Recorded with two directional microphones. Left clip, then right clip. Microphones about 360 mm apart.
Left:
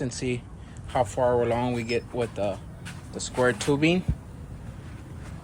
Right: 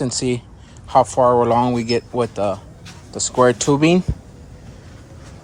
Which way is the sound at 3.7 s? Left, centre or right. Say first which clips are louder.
Right 8 dB; centre.